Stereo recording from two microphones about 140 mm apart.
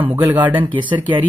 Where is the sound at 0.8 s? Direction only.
35° right (ahead or behind).